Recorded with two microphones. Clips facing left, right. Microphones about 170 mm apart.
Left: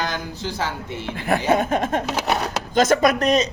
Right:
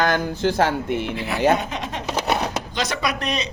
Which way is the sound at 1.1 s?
50° left (ahead or behind).